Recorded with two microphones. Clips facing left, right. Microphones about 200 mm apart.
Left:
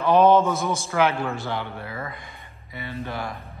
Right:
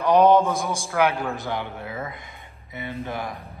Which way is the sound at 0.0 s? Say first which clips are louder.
Even; 15° right (ahead or behind).